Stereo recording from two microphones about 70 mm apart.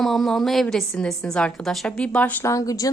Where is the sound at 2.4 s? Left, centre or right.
Left.